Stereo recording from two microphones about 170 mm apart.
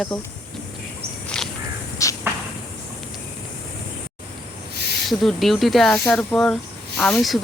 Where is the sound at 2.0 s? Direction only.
20° left (ahead or behind).